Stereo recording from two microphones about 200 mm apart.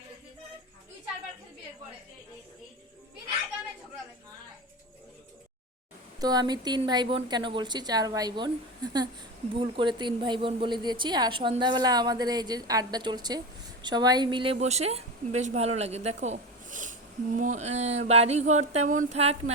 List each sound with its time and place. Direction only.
6.1 s a woman's voice: 20° right (ahead or behind)